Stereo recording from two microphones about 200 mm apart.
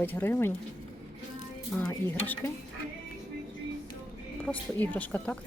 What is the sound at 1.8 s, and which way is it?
Speech, 10° left (ahead or behind).